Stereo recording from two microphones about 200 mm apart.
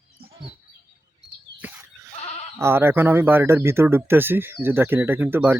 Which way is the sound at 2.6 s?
10° right (ahead or behind).